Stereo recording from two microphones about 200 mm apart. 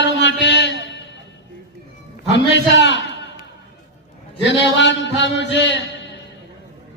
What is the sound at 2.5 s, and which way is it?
Speech, 60° left (ahead or behind).